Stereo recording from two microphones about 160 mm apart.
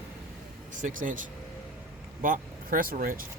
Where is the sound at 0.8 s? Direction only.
55° right (ahead or behind).